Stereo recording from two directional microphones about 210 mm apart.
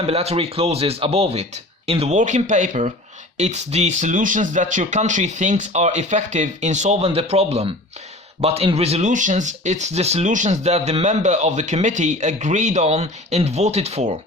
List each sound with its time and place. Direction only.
0.0 s speech: 30° right (ahead or behind)